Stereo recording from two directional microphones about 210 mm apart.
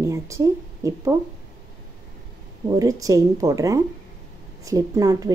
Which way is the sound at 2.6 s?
15° right (ahead or behind).